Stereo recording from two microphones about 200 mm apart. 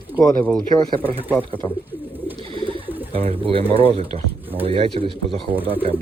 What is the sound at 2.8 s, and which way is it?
Bird, 10° right (ahead or behind).